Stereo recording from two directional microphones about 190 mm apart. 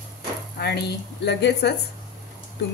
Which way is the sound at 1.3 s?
60° left (ahead or behind).